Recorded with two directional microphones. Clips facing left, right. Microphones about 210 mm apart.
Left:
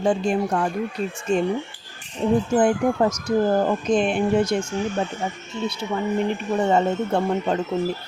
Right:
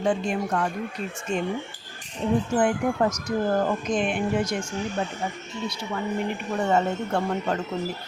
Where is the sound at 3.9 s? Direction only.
30° left (ahead or behind).